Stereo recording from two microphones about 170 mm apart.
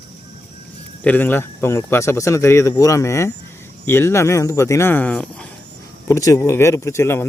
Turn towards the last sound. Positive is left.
turn(degrees=15)  # may be behind; listen again after turning